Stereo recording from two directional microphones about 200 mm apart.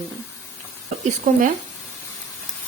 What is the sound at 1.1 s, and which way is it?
Speech, 40° right (ahead or behind).